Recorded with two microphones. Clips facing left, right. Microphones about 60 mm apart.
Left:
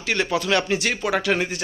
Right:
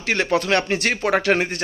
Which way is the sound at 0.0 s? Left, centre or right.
Right.